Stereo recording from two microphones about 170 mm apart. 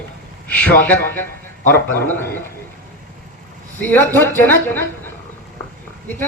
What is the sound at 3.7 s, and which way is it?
A man's voice, 15° left (ahead or behind).